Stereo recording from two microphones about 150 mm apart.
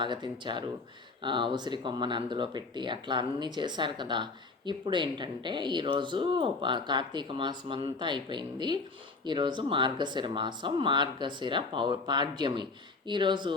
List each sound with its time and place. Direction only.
0.0 s speech: 30° right (ahead or behind)